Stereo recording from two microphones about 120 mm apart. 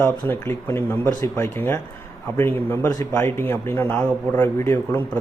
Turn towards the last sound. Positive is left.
turn(degrees=20)  # may be behind; listen again after turning